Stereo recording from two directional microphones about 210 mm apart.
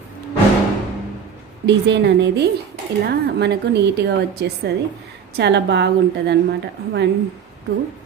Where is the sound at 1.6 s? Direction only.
55° right (ahead or behind).